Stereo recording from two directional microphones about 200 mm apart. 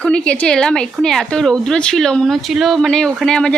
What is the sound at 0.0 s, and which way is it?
Speech, 5° left (ahead or behind).